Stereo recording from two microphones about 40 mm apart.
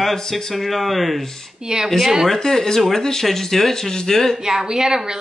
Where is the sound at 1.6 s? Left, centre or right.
Centre.